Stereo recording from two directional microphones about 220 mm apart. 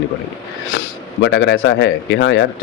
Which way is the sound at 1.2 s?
50° left (ahead or behind).